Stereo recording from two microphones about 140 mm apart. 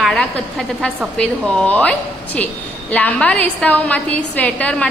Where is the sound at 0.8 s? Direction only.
5° left (ahead or behind).